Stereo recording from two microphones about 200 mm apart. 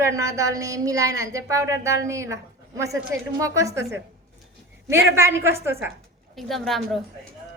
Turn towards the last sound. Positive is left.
turn(degrees=0)  # may be behind; listen again after turning